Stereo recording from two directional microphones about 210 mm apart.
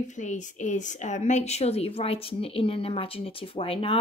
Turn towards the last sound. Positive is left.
turn(degrees=25)  # may be behind; listen again after turning